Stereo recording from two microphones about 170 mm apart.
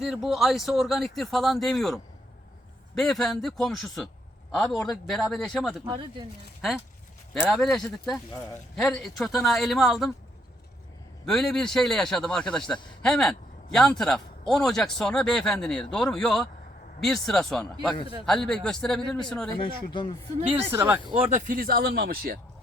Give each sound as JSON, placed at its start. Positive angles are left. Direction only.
{"t": 0.0, "sound": "a man's voice", "side_deg": 0}
{"t": 5.9, "sound": "speech", "side_deg": -25}
{"t": 6.6, "sound": "a man's voice", "side_deg": 0}
{"t": 11.3, "sound": "a man's voice", "side_deg": 0}
{"t": 19.5, "sound": "speech", "side_deg": 30}
{"t": 20.5, "sound": "speech", "side_deg": -15}
{"t": 21.2, "sound": "speech", "side_deg": -50}